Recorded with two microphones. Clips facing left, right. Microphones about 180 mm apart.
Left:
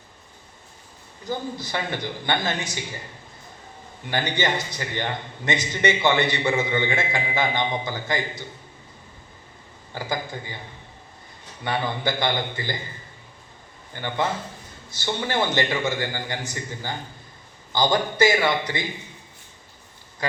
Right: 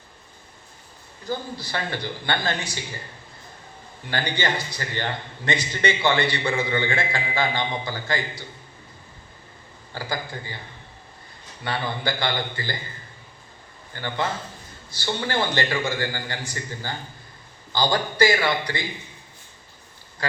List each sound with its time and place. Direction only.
1.2 s a man's voice: 20° left (ahead or behind)
4.1 s a man's voice: 20° left (ahead or behind)
9.9 s a man's voice: 20° left (ahead or behind)
11.6 s a man's voice: 20° left (ahead or behind)
13.9 s a man's voice: 15° left (ahead or behind)